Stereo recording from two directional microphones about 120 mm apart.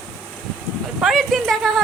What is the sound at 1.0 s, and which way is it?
Speech, centre (ahead or behind).